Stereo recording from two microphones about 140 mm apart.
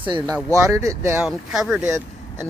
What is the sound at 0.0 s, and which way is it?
Speech, 35° right (ahead or behind).